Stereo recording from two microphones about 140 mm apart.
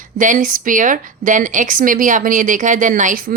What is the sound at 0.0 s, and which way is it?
A woman's voice, 65° right (ahead or behind).